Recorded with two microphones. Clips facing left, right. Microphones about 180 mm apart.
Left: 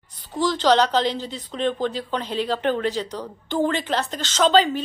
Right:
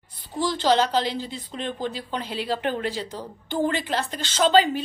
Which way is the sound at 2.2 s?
10° right (ahead or behind).